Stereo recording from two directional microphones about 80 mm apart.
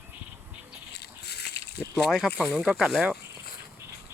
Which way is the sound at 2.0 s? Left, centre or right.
Centre.